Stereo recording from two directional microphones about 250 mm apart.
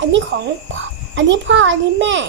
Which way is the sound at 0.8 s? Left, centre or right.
Right.